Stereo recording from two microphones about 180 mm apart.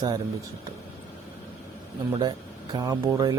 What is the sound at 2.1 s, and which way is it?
Speech, 25° right (ahead or behind).